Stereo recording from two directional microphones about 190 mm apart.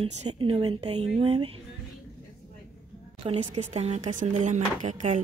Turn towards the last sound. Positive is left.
turn(degrees=-40)  # may be behind; listen again after turning